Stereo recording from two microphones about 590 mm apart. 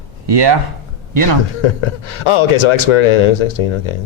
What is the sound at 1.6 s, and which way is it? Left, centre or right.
Speech, left.